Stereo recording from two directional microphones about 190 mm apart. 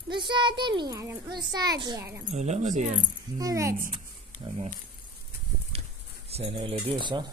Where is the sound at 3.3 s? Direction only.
20° right (ahead or behind).